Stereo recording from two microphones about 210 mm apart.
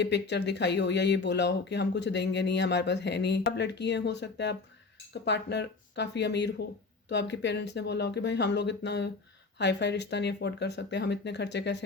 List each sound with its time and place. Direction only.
0.0 s speech: 55° left (ahead or behind)